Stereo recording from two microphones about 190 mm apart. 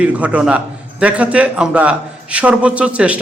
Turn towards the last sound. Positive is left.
turn(degrees=-5)  # may be behind; listen again after turning